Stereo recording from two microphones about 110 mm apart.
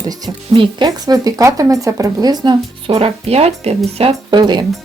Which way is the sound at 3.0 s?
70° right (ahead or behind).